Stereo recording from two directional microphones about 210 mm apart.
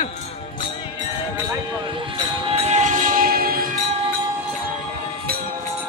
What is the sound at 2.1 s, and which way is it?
Train, 30° right (ahead or behind).